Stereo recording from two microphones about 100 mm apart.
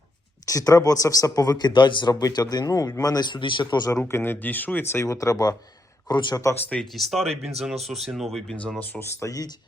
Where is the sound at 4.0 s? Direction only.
25° left (ahead or behind); by 6.4 s 45° left (ahead or behind).